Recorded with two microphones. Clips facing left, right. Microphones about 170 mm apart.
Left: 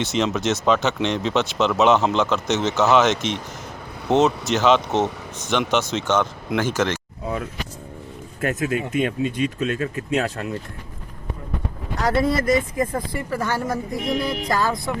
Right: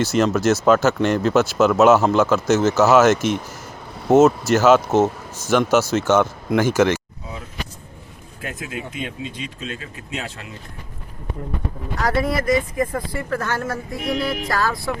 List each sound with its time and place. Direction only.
0.0 s speech: centre (ahead or behind)
8.4 s speech: 60° left (ahead or behind)
12.0 s speech: 25° left (ahead or behind)
13.3 s speech: 10° left (ahead or behind)